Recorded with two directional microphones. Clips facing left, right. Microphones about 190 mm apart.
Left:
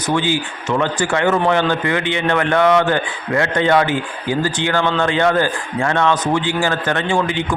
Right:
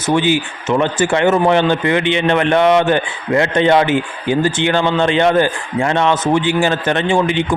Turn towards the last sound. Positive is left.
turn(degrees=-20)  # may be behind; listen again after turning